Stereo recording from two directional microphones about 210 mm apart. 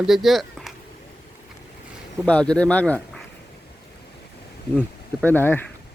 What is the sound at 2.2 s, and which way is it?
Speech, 5° left (ahead or behind).